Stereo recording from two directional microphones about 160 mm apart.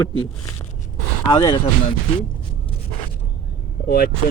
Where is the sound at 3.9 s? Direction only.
70° left (ahead or behind).